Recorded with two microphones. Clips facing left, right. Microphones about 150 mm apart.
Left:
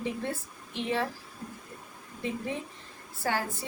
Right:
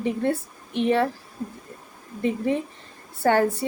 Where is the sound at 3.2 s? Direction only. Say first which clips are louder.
Right 11 dB; 60° right (ahead or behind).